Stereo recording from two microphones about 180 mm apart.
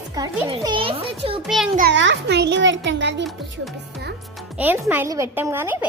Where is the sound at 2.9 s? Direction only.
75° right (ahead or behind).